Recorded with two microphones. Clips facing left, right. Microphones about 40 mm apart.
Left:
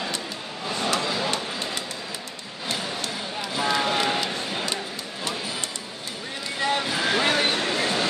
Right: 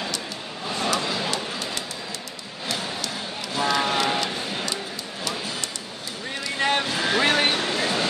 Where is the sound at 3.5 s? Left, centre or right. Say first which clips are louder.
Right 1 dB; centre.